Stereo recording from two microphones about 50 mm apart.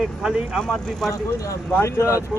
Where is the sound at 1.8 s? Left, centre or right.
Left.